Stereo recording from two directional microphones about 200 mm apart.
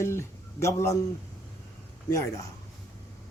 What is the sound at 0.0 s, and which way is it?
Speech, 15° left (ahead or behind).